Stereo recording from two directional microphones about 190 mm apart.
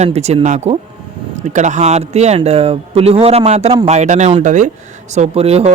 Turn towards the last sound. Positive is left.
turn(degrees=-35)  # may be behind; listen again after turning